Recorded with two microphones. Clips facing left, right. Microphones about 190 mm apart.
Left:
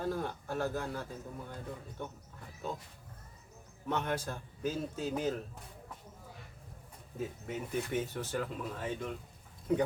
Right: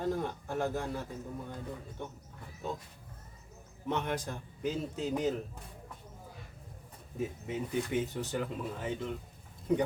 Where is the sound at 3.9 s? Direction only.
15° right (ahead or behind).